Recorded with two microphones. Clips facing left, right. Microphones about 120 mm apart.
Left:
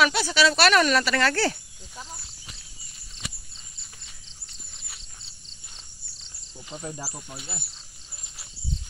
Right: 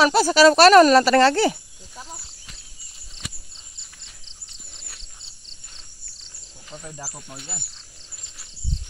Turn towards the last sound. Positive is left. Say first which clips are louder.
# right 1 dB
turn(degrees=5)  # may be behind; listen again after turning